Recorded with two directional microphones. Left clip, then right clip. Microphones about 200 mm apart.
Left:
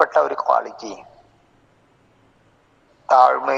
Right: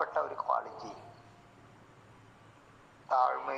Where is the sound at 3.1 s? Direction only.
50° left (ahead or behind).